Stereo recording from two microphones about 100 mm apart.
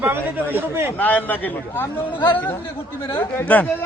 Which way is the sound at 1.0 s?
15° left (ahead or behind).